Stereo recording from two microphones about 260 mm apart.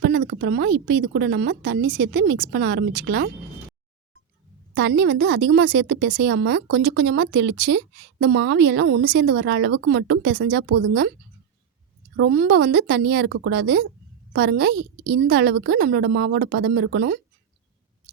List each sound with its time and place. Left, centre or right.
0.0 s a woman's voice: right
4.7 s a woman's voice: right
12.1 s a woman's voice: right